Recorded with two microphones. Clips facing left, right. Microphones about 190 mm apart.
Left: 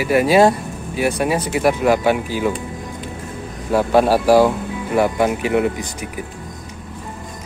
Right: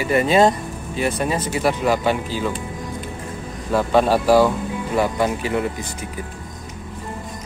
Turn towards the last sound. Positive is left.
turn(degrees=15)  # may be behind; listen again after turning